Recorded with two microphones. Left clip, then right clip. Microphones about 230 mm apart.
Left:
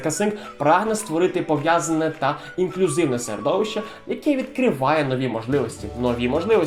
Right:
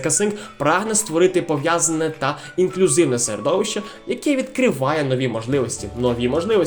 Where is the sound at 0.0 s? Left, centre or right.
Right.